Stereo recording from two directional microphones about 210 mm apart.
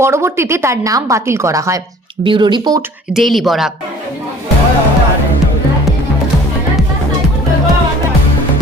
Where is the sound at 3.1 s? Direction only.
Centre (ahead or behind).